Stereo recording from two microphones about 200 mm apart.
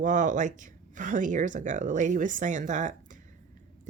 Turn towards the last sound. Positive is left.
turn(degrees=-40)  # may be behind; listen again after turning